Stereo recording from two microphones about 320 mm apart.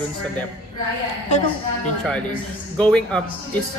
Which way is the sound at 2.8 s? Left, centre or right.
Centre.